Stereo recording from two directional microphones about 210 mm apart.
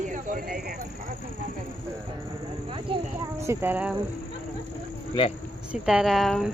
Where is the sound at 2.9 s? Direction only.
25° right (ahead or behind).